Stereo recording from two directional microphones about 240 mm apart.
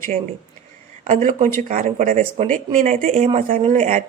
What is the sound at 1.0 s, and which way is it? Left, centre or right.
A woman's voice, right.